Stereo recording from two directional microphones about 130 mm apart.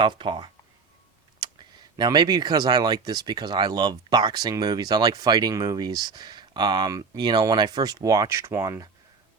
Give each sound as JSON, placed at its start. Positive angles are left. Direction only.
{"t": 0.0, "sound": "speech", "side_deg": -40}
{"t": 2.0, "sound": "speech", "side_deg": -30}